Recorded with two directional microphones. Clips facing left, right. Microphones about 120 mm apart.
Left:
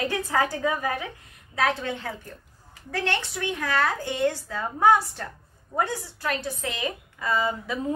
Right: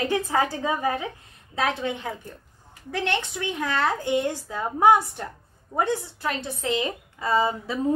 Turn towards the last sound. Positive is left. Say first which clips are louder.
# right 3 dB
turn(degrees=-35)  # may be behind; listen again after turning